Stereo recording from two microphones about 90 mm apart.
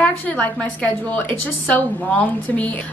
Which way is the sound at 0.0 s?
15° left (ahead or behind).